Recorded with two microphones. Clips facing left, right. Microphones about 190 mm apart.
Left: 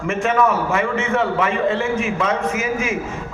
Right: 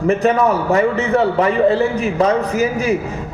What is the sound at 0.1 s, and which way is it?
A man's voice, 35° right (ahead or behind).